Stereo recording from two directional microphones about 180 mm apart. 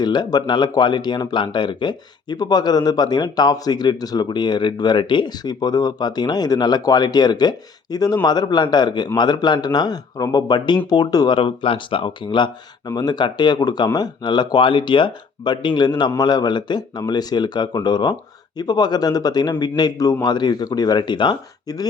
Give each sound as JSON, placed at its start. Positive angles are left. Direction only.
{"t": 0.0, "sound": "speech", "side_deg": 25}